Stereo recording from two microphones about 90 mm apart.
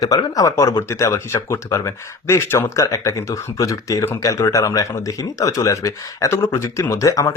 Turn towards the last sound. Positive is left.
turn(degrees=35)  # may be behind; listen again after turning